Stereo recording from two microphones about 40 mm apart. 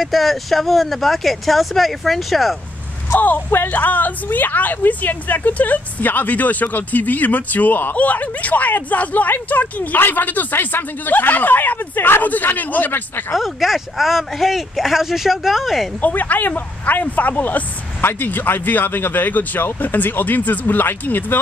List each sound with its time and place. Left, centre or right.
0.0 s speech: centre
3.2 s a woman's voice: left
9.9 s a woman's voice: left
13.3 s speech: centre
16.0 s a woman's voice: left